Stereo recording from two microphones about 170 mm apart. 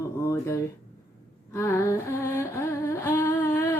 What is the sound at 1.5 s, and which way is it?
Humming, 15° left (ahead or behind).